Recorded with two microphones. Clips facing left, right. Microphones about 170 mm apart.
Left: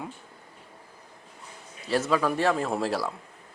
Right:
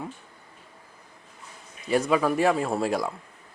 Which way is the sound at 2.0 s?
10° right (ahead or behind).